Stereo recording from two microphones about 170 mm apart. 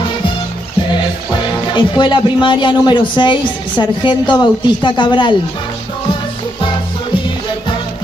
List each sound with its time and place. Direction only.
1.7 s a man's voice: 25° left (ahead or behind)